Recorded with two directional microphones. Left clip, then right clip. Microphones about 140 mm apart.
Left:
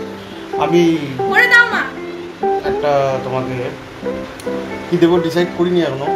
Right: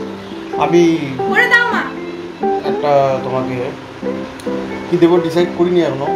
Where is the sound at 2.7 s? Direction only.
10° left (ahead or behind).